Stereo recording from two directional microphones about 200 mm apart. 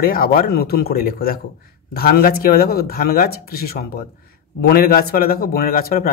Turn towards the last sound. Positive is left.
turn(degrees=50)  # may be behind; listen again after turning